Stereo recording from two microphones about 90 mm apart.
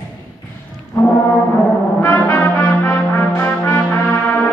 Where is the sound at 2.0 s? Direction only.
20° left (ahead or behind).